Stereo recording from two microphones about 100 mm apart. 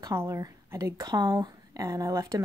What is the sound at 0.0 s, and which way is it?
A woman's voice, 30° right (ahead or behind).